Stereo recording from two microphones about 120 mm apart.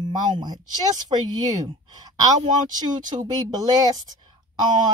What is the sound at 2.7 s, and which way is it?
Speech, 35° right (ahead or behind).